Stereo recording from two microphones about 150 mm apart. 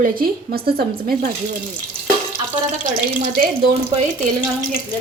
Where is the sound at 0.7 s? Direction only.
90° right.